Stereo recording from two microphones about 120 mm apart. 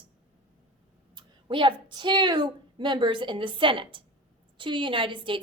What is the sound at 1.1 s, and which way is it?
A woman's voice, 40° right (ahead or behind).